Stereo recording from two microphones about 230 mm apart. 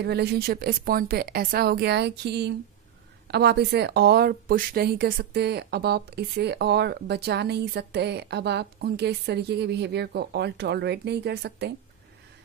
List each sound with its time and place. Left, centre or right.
0.0 s speech: right